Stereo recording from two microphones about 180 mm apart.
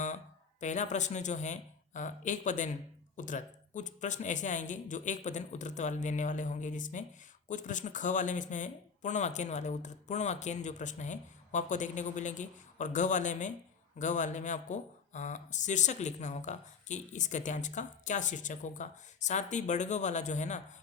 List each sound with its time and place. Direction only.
0.6 s speech: 40° left (ahead or behind)